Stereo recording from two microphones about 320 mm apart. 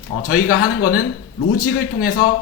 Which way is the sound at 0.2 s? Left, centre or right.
Left.